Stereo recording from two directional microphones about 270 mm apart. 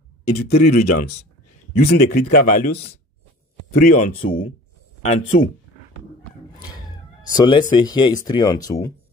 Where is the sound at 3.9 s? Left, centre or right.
Left.